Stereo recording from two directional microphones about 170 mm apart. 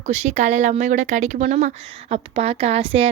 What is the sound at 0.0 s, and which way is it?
A woman's voice, 45° right (ahead or behind).